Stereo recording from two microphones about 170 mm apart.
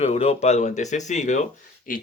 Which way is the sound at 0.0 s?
35° left (ahead or behind).